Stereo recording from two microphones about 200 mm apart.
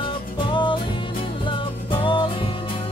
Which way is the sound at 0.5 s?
25° left (ahead or behind).